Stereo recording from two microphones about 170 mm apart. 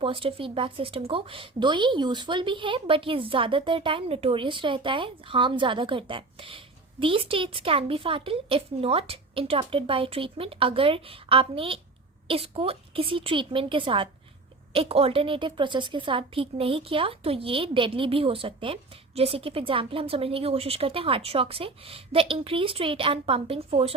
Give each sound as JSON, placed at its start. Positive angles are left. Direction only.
{"t": 0.0, "sound": "a woman's voice", "side_deg": -30}